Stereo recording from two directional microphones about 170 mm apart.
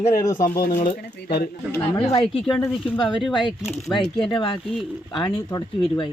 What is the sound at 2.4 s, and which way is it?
Speech, 5° left (ahead or behind).